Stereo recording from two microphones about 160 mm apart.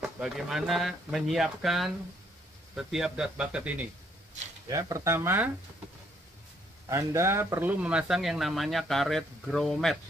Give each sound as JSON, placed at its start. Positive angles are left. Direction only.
{"t": 0.0, "sound": "speech", "side_deg": -5}
{"t": 4.6, "sound": "speech", "side_deg": -20}
{"t": 6.9, "sound": "speech", "side_deg": -20}